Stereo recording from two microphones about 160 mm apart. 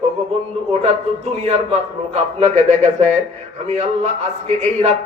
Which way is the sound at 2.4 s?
45° right (ahead or behind).